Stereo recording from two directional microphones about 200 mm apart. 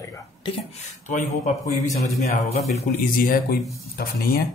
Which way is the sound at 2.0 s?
35° left (ahead or behind).